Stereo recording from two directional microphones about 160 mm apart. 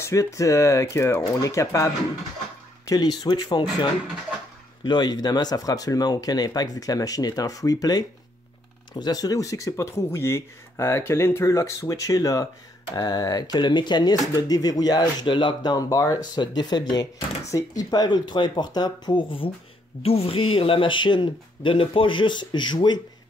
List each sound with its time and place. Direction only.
0.0 s speech: 20° left (ahead or behind)
2.9 s speech: 25° left (ahead or behind)
4.8 s speech: 25° left (ahead or behind)